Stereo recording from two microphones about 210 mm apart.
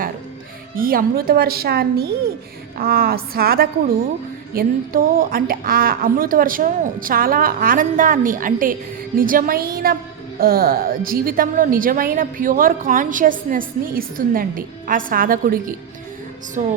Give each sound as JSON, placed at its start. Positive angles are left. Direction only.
{"t": 0.8, "sound": "a woman's voice", "side_deg": -45}